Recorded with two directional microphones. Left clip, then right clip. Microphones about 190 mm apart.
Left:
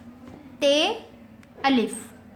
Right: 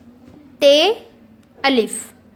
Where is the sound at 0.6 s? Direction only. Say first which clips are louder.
Right 9 dB; 45° right (ahead or behind).